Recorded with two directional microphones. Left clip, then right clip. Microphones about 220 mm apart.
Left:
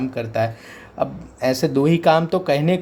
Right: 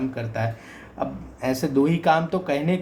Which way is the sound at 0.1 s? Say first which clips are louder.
Left 6 dB; 55° left (ahead or behind).